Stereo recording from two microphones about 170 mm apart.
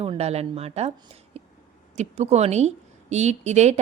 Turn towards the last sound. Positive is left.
turn(degrees=-40)  # may be behind; listen again after turning